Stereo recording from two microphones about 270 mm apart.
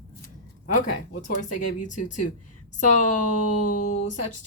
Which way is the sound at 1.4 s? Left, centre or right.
Left.